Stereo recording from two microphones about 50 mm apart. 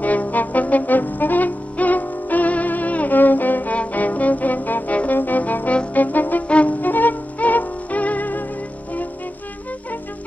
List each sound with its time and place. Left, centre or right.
0.0 s brass instrument: left
5.9 s music: left